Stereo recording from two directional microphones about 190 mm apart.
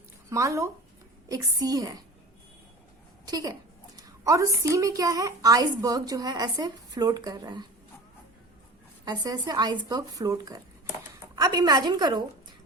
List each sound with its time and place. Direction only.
0.3 s a woman's voice: 15° right (ahead or behind)
3.2 s a woman's voice: 20° right (ahead or behind)
9.0 s a woman's voice: 20° right (ahead or behind)